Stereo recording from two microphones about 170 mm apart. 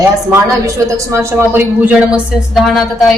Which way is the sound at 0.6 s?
20° right (ahead or behind).